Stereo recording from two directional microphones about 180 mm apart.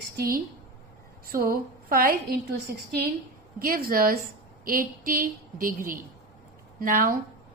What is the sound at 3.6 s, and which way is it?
A woman's voice, 55° right (ahead or behind).